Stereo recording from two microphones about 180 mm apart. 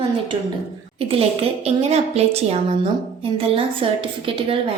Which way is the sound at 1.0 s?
30° right (ahead or behind).